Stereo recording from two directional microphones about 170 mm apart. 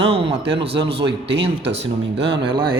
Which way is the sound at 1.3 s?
90° right.